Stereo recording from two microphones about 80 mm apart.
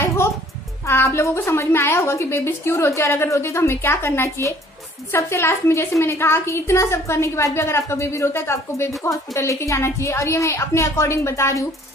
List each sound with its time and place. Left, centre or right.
0.0 s music: left
0.8 s a woman's voice: left